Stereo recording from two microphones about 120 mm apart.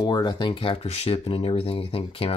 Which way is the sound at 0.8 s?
60° left (ahead or behind).